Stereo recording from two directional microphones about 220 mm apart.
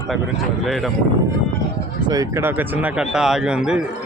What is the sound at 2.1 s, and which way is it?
Speech, 15° right (ahead or behind).